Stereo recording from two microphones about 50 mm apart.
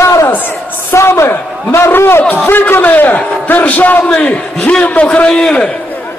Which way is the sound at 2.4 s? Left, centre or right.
Left.